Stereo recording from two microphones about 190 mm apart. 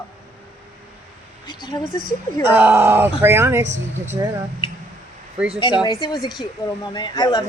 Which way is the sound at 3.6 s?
40° right (ahead or behind).